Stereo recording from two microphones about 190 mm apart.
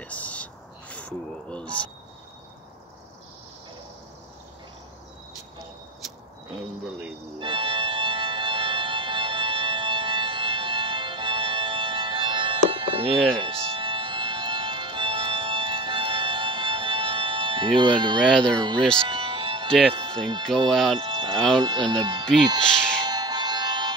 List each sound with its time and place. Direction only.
0.0 s a sound: 5° left (ahead or behind)
7.3 s music: 25° right (ahead or behind)
18.2 s speech: centre (ahead or behind)
19.0 s music: 25° right (ahead or behind)
19.9 s speech: 25° right (ahead or behind)
20.7 s speech: centre (ahead or behind)
21.0 s speech: 25° right (ahead or behind)
23.0 s music: 20° right (ahead or behind)